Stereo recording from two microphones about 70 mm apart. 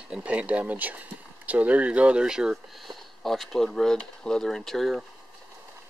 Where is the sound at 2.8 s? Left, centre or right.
Centre.